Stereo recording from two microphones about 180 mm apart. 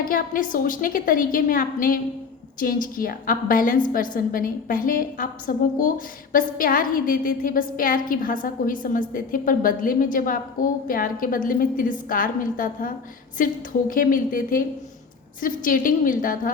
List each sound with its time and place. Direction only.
0.0 s a woman's voice: 50° left (ahead or behind)